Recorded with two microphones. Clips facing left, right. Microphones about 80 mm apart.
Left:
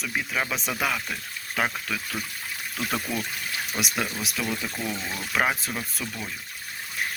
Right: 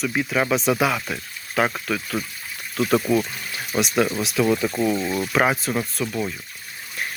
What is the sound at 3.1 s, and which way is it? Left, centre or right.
Speech, right.